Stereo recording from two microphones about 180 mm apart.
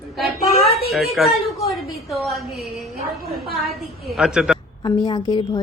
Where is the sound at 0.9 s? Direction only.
Centre (ahead or behind).